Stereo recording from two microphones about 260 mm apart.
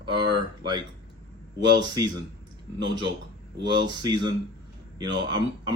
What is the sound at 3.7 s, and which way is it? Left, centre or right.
Speech, centre.